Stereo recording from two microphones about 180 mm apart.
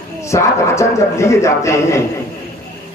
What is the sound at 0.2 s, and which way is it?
A man's voice, 15° left (ahead or behind).